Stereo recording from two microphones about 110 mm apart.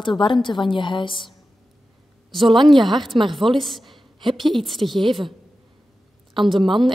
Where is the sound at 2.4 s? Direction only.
45° right (ahead or behind).